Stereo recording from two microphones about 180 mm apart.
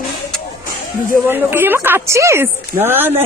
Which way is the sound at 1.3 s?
10° right (ahead or behind).